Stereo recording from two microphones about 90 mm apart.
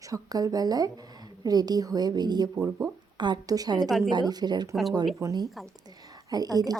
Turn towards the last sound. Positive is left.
turn(degrees=-45)  # may be behind; listen again after turning